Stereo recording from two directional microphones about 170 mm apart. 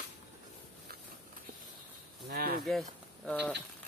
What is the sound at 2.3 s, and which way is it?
Snake, 60° right (ahead or behind).